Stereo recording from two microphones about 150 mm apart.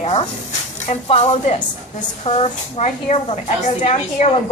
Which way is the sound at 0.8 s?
45° left (ahead or behind).